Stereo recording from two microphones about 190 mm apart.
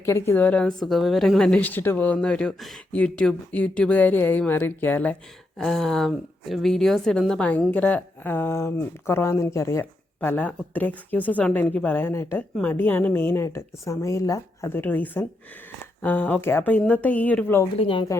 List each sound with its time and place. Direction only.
0.0 s a woman's voice: 15° left (ahead or behind)
17.7 s speech: 25° left (ahead or behind)